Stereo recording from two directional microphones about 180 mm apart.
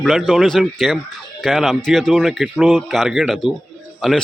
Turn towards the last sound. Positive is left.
turn(degrees=0)  # may be behind; listen again after turning